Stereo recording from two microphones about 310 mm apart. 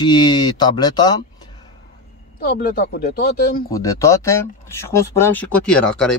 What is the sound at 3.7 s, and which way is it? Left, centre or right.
Speech, centre.